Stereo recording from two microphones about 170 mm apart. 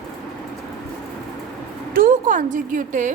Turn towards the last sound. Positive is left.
turn(degrees=-45)  # may be behind; listen again after turning